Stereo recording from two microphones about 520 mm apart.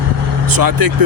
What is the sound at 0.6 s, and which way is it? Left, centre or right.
Speech, right.